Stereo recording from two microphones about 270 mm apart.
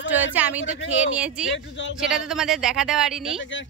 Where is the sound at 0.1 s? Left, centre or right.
Centre.